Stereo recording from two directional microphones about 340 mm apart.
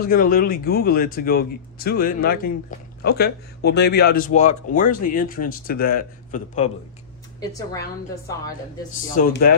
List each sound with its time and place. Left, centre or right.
0.0 s speech: left
7.3 s speech: centre
9.1 s speech: left